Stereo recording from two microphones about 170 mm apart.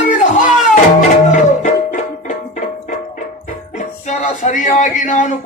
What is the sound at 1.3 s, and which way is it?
Tabla, 45° left (ahead or behind).